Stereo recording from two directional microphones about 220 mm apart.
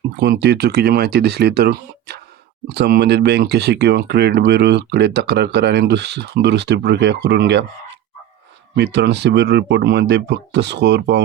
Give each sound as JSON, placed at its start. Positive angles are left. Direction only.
{"t": 0.2, "sound": "speech", "side_deg": -50}
{"t": 8.7, "sound": "speech", "side_deg": -50}